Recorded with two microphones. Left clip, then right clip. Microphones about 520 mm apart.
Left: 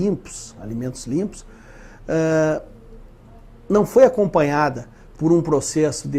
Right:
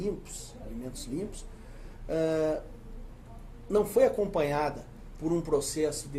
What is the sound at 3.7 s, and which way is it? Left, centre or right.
Speech, left.